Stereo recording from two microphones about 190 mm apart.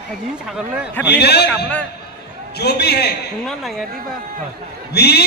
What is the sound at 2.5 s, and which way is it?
Speech, 60° left (ahead or behind).